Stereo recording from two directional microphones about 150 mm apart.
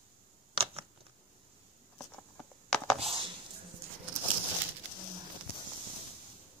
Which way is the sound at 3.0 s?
35° right (ahead or behind).